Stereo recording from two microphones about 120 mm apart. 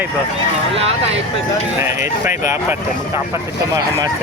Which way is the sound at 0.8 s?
55° right (ahead or behind).